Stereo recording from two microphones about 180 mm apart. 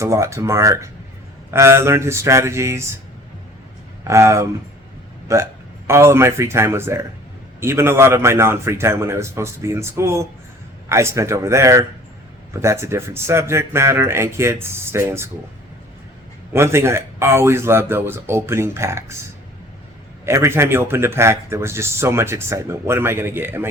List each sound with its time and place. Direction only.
0.0 s speech: 15° right (ahead or behind)
4.0 s speech: 15° right (ahead or behind)
16.5 s speech: 15° right (ahead or behind)
20.2 s speech: 15° right (ahead or behind)